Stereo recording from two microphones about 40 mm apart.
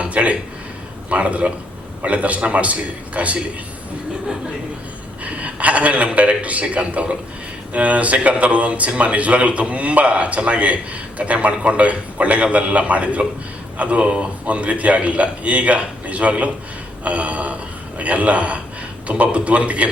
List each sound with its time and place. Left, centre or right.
0.0 s a sound: right
1.1 s a man's voice: right
5.2 s a man's voice: right